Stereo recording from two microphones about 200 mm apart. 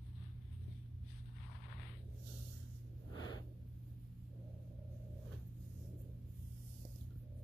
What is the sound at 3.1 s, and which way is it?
Gasp, 20° left (ahead or behind).